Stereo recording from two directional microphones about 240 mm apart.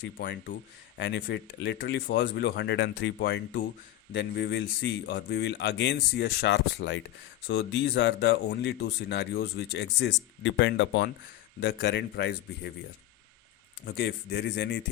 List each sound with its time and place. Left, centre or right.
0.2 s speech: left
13.8 s speech: left